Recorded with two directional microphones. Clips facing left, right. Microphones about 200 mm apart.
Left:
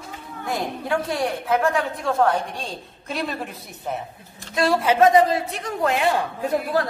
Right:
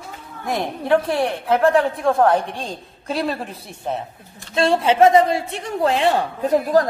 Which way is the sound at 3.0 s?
30° right (ahead or behind).